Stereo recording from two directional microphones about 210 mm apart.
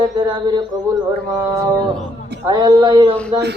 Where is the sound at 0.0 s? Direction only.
20° right (ahead or behind).